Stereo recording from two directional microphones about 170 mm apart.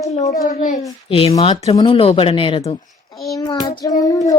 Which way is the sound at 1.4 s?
35° left (ahead or behind).